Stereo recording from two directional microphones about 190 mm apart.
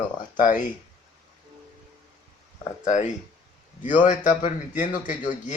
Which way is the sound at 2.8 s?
40° left (ahead or behind).